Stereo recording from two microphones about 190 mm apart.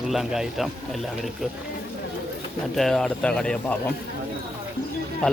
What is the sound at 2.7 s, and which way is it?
A man's voice, centre (ahead or behind).